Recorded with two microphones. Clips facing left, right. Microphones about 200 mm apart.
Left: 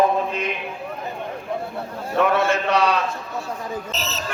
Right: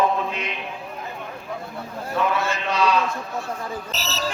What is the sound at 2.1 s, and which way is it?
Speech, 60° left (ahead or behind).